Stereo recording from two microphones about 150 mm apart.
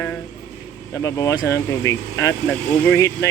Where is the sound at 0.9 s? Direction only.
20° left (ahead or behind).